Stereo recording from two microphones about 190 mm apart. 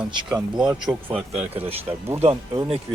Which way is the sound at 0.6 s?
20° right (ahead or behind).